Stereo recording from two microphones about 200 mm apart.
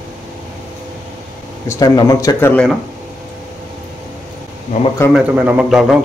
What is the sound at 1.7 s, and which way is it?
Speech, 20° left (ahead or behind).